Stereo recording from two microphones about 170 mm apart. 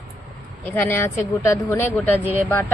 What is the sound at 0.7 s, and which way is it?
Speech, 15° left (ahead or behind).